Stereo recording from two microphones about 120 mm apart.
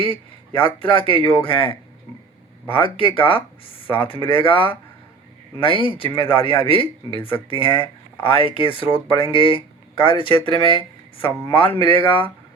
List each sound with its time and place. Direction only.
0.1 s speech: 45° left (ahead or behind)